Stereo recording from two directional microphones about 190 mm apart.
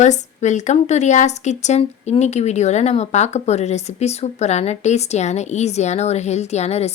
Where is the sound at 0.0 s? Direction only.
40° left (ahead or behind).